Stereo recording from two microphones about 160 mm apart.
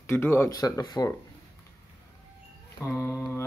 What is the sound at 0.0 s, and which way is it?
Speech, 15° left (ahead or behind).